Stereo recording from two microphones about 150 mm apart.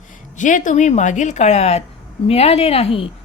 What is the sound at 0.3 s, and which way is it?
Speech, 55° left (ahead or behind).